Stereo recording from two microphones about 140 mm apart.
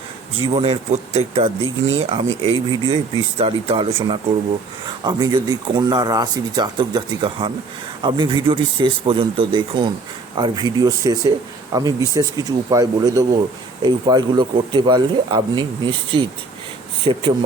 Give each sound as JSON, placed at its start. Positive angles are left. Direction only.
{"t": 0.4, "sound": "speech", "side_deg": -45}
{"t": 2.0, "sound": "speech", "side_deg": -35}